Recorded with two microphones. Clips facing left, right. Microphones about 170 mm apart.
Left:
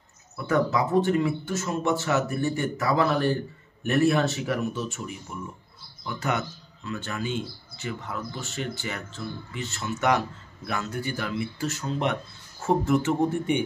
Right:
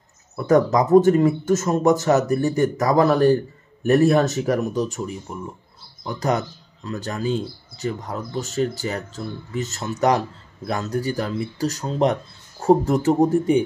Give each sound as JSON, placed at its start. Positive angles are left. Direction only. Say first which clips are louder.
{"t": 0.5, "sound": "speech", "louder": "right 8 dB", "side_deg": -40}